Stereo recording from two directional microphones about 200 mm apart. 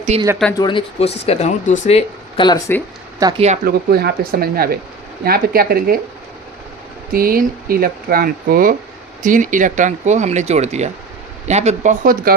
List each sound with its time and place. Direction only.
0.1 s speech: 30° right (ahead or behind)
0.6 s speech: 25° left (ahead or behind)
3.2 s speech: 20° right (ahead or behind)
3.7 s speech: 50° right (ahead or behind)
7.1 s speech: 45° right (ahead or behind)